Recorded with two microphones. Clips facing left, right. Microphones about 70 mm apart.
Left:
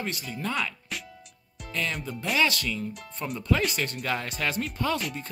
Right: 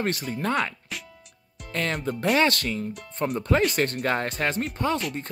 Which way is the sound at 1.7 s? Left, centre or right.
Right.